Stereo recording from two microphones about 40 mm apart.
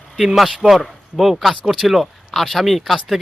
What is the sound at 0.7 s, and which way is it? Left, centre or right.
Speech, centre.